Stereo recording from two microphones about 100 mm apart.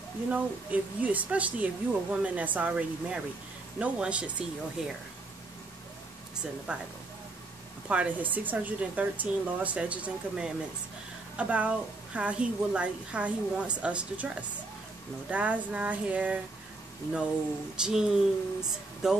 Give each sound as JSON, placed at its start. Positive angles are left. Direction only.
{"t": 0.3, "sound": "a woman's voice", "side_deg": -15}
{"t": 6.7, "sound": "a woman's voice", "side_deg": -10}
{"t": 7.9, "sound": "a woman's voice", "side_deg": -15}
{"t": 17.8, "sound": "speech", "side_deg": -5}